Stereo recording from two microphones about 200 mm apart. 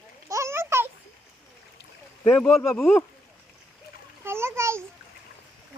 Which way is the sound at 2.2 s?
10° left (ahead or behind).